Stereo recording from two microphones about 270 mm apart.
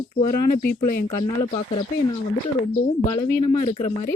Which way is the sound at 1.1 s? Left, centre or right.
Centre.